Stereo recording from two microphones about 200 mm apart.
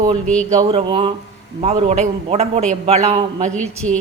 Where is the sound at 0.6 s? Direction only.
25° right (ahead or behind).